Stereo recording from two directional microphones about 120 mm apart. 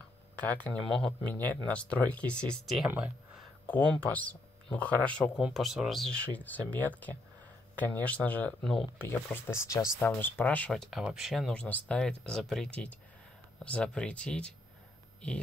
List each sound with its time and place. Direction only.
0.4 s speech: 10° left (ahead or behind)
5.4 s speech: centre (ahead or behind)
8.9 s speech: 20° left (ahead or behind)